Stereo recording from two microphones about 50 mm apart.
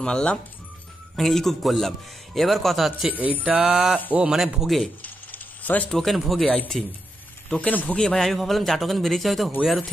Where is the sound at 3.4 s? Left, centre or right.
Right.